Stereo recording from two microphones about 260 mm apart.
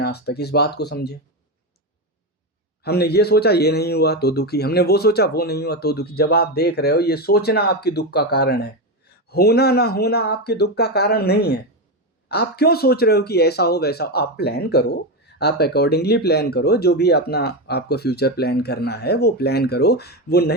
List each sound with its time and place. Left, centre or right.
0.0 s speech: left
2.8 s speech: left